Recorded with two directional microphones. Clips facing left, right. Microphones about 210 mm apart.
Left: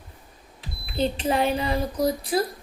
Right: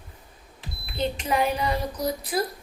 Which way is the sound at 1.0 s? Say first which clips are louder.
Left 2 dB; 30° left (ahead or behind).